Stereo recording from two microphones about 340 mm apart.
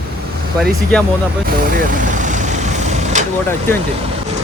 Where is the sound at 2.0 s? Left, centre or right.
Right.